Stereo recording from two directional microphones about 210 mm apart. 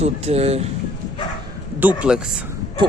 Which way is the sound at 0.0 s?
30° right (ahead or behind).